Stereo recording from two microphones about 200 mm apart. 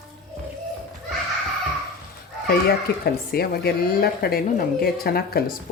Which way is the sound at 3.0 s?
50° left (ahead or behind).